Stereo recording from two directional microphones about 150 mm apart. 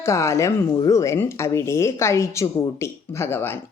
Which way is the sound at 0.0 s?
20° left (ahead or behind).